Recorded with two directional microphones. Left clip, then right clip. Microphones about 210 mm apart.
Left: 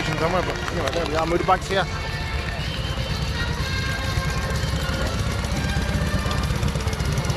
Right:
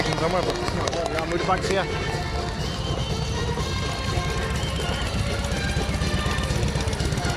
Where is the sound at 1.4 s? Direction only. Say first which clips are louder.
Left 2 dB; 5° right (ahead or behind).